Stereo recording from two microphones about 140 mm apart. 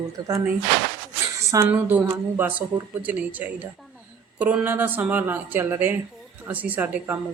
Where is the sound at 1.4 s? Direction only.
20° right (ahead or behind).